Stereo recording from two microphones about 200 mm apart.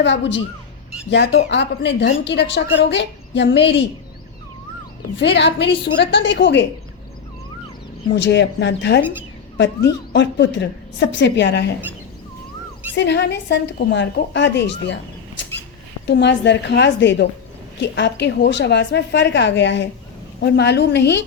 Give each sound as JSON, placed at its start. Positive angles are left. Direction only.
{"t": 0.0, "sound": "a woman's voice", "side_deg": 65}
{"t": 5.2, "sound": "a woman's voice", "side_deg": 60}
{"t": 8.1, "sound": "a woman's voice", "side_deg": 60}
{"t": 12.9, "sound": "a woman's voice", "side_deg": 60}
{"t": 15.4, "sound": "rodents", "side_deg": 65}
{"t": 16.0, "sound": "a woman's voice", "side_deg": 60}